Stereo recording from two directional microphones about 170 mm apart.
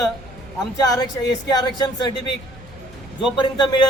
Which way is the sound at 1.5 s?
25° left (ahead or behind).